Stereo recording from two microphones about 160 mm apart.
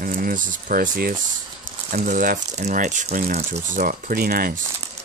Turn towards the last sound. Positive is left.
turn(degrees=-65)  # may be behind; listen again after turning